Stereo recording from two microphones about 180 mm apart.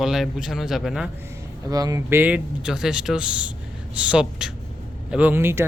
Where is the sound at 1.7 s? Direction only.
20° right (ahead or behind).